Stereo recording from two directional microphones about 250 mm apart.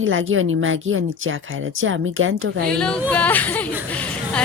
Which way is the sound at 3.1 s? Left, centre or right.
Centre.